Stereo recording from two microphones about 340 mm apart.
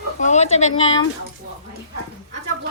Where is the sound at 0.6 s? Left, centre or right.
Left.